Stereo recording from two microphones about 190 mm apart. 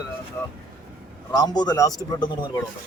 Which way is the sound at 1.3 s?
20° left (ahead or behind).